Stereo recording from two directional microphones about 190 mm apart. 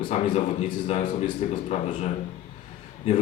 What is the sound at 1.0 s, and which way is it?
Speech, 25° left (ahead or behind).